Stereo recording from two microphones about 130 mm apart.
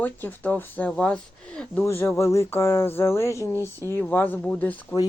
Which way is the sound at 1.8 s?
20° left (ahead or behind).